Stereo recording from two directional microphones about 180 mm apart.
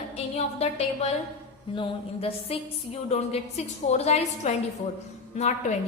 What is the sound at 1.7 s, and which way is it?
A woman's voice, 30° left (ahead or behind).